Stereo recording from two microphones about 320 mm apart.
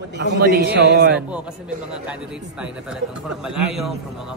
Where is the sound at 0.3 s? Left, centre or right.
Right.